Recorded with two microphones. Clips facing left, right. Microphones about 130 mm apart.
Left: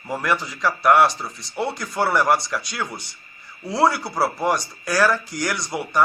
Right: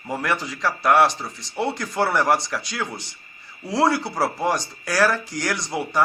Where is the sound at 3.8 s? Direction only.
25° right (ahead or behind).